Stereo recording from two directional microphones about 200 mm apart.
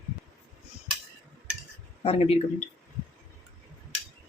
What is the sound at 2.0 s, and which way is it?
Speech, 30° left (ahead or behind).